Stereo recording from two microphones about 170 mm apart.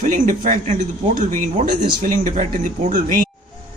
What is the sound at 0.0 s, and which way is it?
Speech, 50° right (ahead or behind).